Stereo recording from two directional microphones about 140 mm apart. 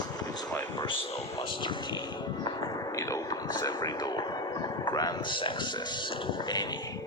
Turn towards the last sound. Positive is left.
turn(degrees=35)  # may be behind; listen again after turning